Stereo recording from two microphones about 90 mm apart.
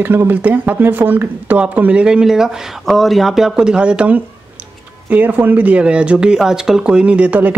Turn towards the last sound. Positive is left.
turn(degrees=-15)  # may be behind; listen again after turning